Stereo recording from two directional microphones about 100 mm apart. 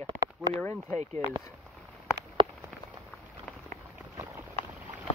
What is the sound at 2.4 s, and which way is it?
Rain on surface, 55° right (ahead or behind).